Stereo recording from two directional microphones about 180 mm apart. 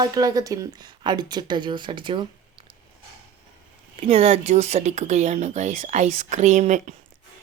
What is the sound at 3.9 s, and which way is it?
Speech, 30° right (ahead or behind).